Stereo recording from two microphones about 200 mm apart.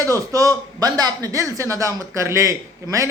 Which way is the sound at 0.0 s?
15° right (ahead or behind).